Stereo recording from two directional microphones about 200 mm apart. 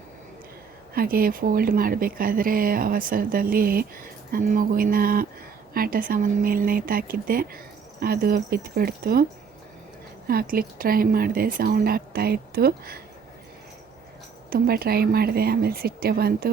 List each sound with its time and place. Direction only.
0.9 s speech: 45° right (ahead or behind)
10.2 s speech: 45° right (ahead or behind)
14.5 s speech: 50° right (ahead or behind)